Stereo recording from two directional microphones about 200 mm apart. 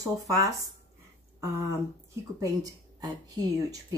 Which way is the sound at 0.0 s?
15° right (ahead or behind).